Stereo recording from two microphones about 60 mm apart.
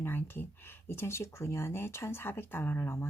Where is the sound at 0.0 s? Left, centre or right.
Left.